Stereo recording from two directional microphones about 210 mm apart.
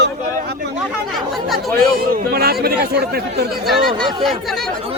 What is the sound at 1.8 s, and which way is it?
Speech, 45° right (ahead or behind).